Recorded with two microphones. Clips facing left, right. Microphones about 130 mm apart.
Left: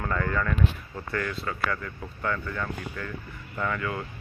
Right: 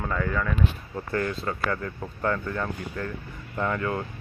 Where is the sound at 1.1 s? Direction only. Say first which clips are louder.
Right 3 dB; 30° right (ahead or behind).